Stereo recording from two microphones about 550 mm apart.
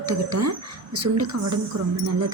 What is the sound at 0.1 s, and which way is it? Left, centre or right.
A woman's voice, right.